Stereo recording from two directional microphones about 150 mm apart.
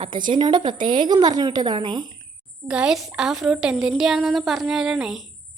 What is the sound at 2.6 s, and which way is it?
A woman's voice, 5° right (ahead or behind).